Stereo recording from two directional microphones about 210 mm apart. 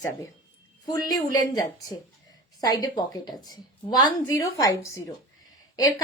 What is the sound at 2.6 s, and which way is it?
A woman's voice, 20° left (ahead or behind).